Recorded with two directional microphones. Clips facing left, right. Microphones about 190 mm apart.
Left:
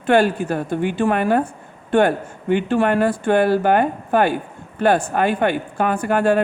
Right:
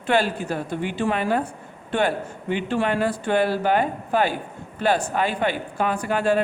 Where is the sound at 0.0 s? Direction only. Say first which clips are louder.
Left 6 dB; 50° left (ahead or behind).